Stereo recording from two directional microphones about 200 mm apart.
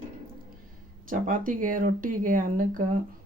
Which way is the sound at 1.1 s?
45° right (ahead or behind).